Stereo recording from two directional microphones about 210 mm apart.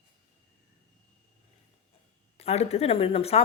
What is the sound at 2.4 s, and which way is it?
A woman's voice, 30° left (ahead or behind).